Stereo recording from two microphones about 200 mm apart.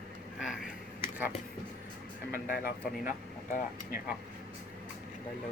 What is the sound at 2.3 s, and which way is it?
Speech, 45° left (ahead or behind).